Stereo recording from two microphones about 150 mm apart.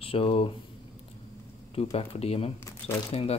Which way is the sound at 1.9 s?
40° left (ahead or behind).